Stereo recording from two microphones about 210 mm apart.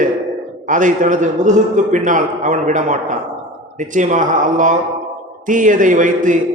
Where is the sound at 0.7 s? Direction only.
40° right (ahead or behind).